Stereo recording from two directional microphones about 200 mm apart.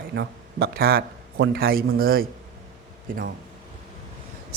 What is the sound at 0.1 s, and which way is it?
A man's voice, 55° right (ahead or behind).